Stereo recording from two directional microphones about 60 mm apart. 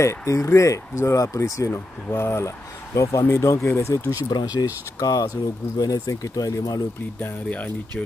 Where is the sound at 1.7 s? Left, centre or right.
Left.